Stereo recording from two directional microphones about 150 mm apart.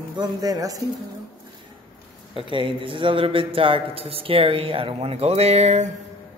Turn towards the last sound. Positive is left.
turn(degrees=-45)  # may be behind; listen again after turning